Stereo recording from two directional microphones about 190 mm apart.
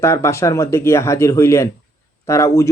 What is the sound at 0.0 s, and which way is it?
A man's voice, 15° left (ahead or behind).